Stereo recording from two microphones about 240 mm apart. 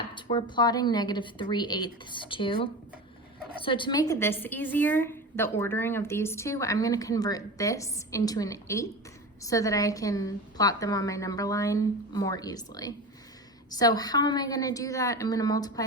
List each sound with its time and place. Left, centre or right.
0.1 s a woman's voice: centre
3.6 s a woman's voice: left